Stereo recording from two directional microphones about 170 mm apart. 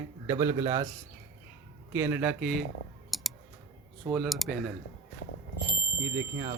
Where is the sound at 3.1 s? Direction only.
Centre (ahead or behind).